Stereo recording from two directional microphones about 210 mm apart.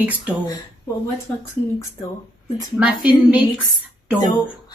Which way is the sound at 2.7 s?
5° right (ahead or behind).